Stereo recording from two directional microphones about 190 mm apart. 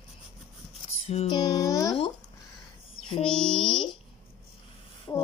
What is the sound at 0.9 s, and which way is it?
Female singing, 35° left (ahead or behind).